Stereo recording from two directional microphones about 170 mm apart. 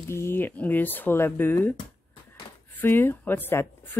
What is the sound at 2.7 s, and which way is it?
Speech, 10° left (ahead or behind).